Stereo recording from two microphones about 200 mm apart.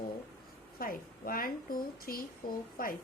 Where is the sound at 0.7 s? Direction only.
45° left (ahead or behind).